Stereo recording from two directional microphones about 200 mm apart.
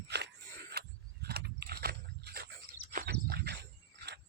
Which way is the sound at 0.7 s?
50° right (ahead or behind).